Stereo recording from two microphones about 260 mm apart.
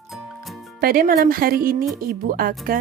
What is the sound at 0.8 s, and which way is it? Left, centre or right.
Speech, right.